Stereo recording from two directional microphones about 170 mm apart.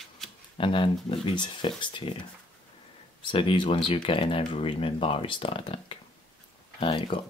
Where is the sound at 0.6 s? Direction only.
30° left (ahead or behind).